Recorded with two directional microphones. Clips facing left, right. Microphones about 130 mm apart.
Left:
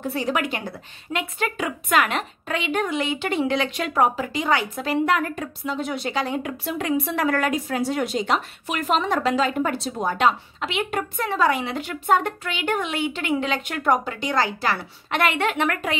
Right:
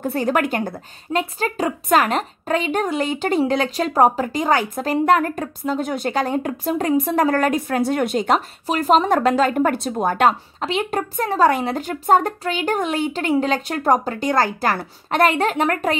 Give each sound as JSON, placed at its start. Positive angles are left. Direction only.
{"t": 0.0, "sound": "a woman's voice", "side_deg": -50}
{"t": 8.6, "sound": "a woman's voice", "side_deg": -35}
{"t": 10.6, "sound": "a woman's voice", "side_deg": -35}